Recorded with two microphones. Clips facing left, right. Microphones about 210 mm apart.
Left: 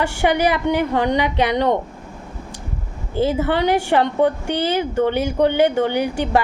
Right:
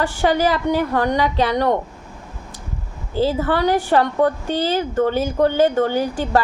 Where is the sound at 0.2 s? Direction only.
15° left (ahead or behind).